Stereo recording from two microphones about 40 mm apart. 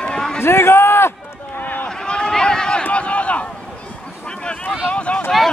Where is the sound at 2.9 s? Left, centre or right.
Left.